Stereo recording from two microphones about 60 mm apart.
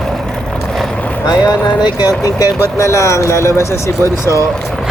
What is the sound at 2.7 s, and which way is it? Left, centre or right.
Speech, left.